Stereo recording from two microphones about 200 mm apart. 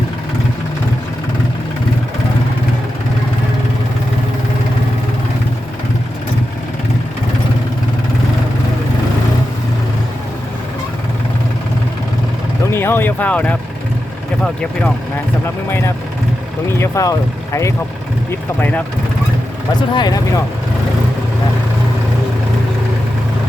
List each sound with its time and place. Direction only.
12.7 s speech: 10° left (ahead or behind)
19.9 s speech: 20° left (ahead or behind)